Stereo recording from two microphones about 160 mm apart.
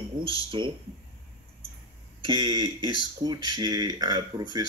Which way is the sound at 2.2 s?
30° right (ahead or behind).